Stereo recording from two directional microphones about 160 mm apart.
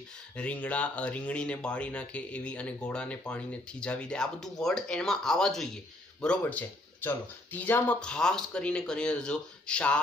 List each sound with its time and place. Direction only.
0.4 s speech: 10° left (ahead or behind)